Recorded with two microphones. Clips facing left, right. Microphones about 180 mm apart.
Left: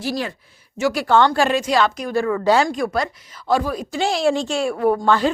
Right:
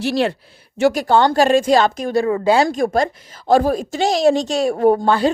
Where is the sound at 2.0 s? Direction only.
25° right (ahead or behind).